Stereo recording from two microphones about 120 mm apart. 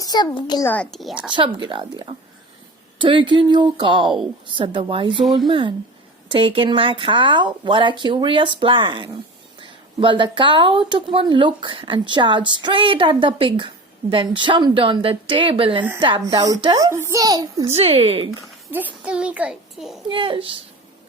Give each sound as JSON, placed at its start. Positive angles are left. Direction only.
{"t": 0.0, "sound": "a sound", "side_deg": 35}
{"t": 0.3, "sound": "a child's voice", "side_deg": 40}
{"t": 0.6, "sound": "a child's voice", "side_deg": 15}
{"t": 0.9, "sound": "speech", "side_deg": 0}
{"t": 1.3, "sound": "a woman's voice", "side_deg": -40}
{"t": 16.7, "sound": "a child's voice", "side_deg": -25}
{"t": 17.7, "sound": "speech", "side_deg": -60}
{"t": 19.0, "sound": "a child's voice", "side_deg": -10}
{"t": 20.1, "sound": "speech", "side_deg": -45}